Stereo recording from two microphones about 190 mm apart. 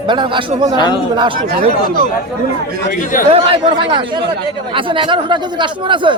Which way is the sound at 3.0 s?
45° left (ahead or behind).